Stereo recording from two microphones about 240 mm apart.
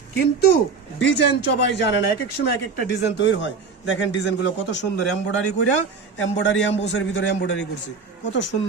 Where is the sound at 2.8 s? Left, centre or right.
Left.